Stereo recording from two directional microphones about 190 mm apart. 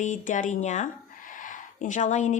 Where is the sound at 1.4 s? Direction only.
40° left (ahead or behind).